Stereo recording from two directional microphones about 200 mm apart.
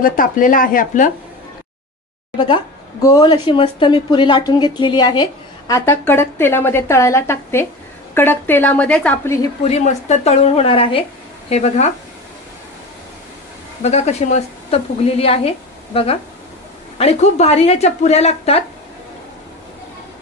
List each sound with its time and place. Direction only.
0.0 s speech: 45° left (ahead or behind)
2.3 s a woman's voice: 25° left (ahead or behind)
9.7 s a woman's voice: 35° left (ahead or behind)
13.8 s a woman's voice: 35° left (ahead or behind)